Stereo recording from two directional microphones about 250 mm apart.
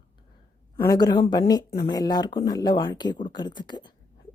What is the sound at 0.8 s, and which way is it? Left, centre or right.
A woman's voice, centre.